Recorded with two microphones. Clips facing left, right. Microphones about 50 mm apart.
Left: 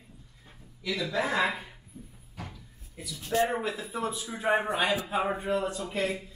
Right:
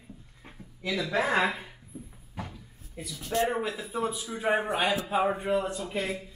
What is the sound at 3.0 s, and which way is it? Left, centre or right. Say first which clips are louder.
Speech: even; right.